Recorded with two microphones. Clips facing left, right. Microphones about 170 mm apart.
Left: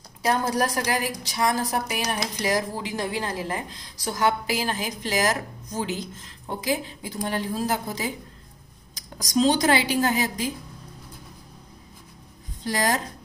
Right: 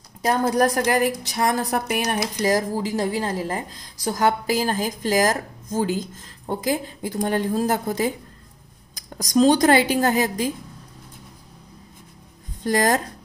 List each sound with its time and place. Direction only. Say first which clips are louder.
0.3 s a woman's voice: right 4 dB; 50° right (ahead or behind)
9.4 s a woman's voice: right 5 dB; 50° right (ahead or behind)
12.6 s a woman's voice: right 5 dB; 45° right (ahead or behind)